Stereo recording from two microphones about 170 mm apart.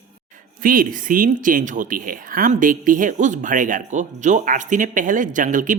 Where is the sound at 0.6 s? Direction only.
55° right (ahead or behind).